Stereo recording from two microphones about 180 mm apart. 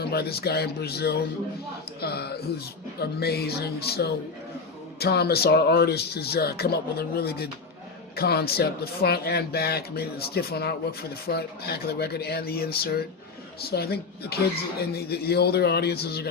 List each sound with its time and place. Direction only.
0.0 s speech: 60° left (ahead or behind)